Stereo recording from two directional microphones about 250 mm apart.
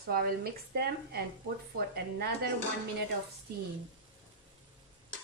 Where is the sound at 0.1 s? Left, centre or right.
Right.